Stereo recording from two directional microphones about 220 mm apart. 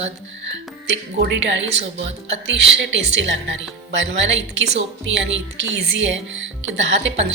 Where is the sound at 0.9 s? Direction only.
55° right (ahead or behind).